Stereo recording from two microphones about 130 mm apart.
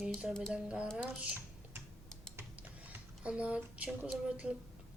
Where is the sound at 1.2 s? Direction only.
15° right (ahead or behind).